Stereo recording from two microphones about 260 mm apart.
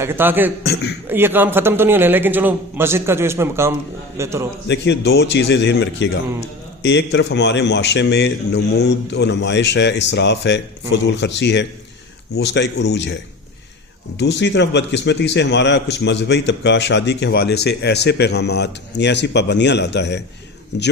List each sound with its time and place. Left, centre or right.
0.0 s a man's voice: centre
0.6 s a man's voice: left
1.0 s a man's voice: centre
4.7 s a man's voice: left
14.2 s a man's voice: left